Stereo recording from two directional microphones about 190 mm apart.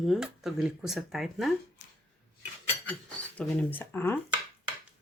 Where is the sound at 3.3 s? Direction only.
10° left (ahead or behind).